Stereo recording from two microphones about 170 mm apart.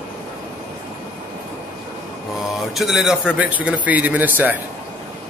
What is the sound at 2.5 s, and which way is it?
A man's voice, centre (ahead or behind).